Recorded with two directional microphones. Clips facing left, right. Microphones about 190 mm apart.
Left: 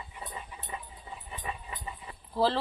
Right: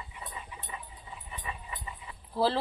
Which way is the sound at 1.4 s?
45° left (ahead or behind).